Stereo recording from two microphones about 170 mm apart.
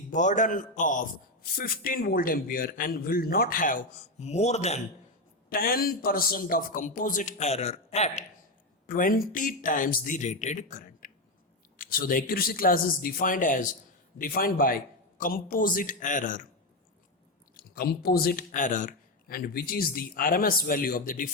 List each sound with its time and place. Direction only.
0.1 s a man's voice: 45° left (ahead or behind)
5.5 s a man's voice: 60° left (ahead or behind); by 8.2 s 40° left (ahead or behind)
8.9 s a man's voice: 55° left (ahead or behind)
17.6 s a man's voice: 60° left (ahead or behind)